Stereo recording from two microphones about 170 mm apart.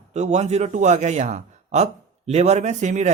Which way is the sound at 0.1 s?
40° right (ahead or behind).